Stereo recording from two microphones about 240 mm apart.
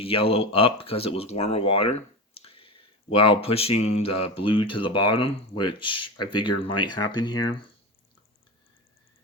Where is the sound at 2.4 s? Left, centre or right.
Left.